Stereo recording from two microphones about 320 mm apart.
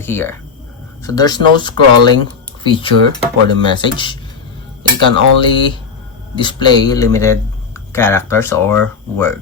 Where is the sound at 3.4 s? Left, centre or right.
Centre.